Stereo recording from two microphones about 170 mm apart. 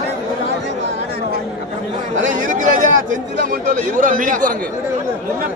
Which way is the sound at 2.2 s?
50° right (ahead or behind).